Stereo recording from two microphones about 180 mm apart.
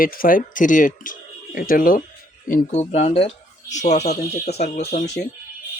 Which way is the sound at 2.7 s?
35° left (ahead or behind).